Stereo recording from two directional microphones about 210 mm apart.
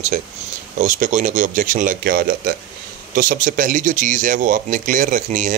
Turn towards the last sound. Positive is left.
turn(degrees=-35)  # may be behind; listen again after turning